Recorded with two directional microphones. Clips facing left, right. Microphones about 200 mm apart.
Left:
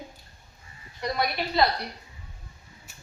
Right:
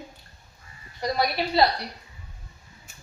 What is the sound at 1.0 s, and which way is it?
Speech, 35° right (ahead or behind).